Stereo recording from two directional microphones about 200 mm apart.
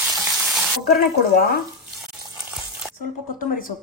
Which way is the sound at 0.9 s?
50° left (ahead or behind).